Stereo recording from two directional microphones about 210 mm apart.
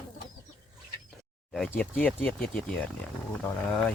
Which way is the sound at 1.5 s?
5° left (ahead or behind).